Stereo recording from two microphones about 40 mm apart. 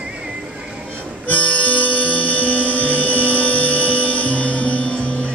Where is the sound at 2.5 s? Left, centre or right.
Left.